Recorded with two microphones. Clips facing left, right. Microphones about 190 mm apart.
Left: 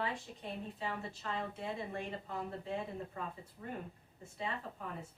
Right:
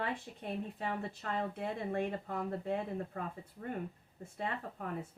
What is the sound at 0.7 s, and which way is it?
Speech, 55° right (ahead or behind).